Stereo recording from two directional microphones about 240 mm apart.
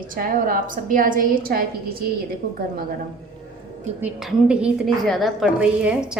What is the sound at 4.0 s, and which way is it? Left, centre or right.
A woman's voice, centre.